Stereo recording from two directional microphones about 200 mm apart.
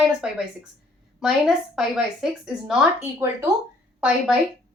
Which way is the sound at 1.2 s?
5° right (ahead or behind).